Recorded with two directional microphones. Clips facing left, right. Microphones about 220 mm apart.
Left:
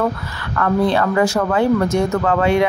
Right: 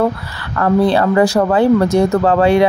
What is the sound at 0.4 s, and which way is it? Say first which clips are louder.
Speech: right 4 dB; 35° right (ahead or behind).